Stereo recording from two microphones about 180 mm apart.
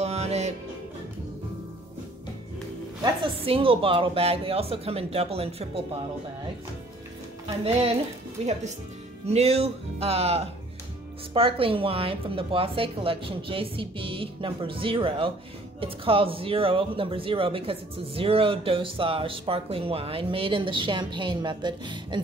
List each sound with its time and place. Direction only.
0.0 s music: 35° right (ahead or behind)
3.0 s speech: 30° right (ahead or behind)
7.4 s speech: 35° right (ahead or behind)